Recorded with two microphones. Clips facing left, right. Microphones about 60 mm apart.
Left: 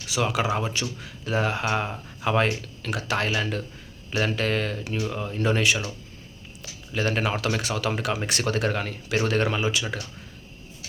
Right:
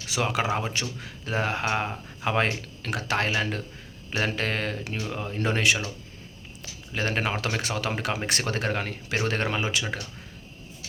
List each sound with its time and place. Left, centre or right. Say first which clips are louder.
0.1 s speech: left 1 dB; right
5.4 s speech: left 1 dB; right